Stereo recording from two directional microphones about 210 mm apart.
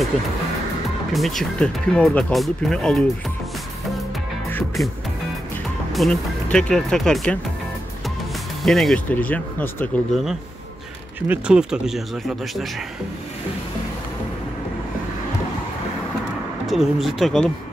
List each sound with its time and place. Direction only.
1.1 s speech: centre (ahead or behind)
4.5 s music: 10° left (ahead or behind)
5.9 s speech: centre (ahead or behind)
8.6 s speech: centre (ahead or behind)
11.1 s speech: 5° right (ahead or behind)
16.6 s speech: centre (ahead or behind)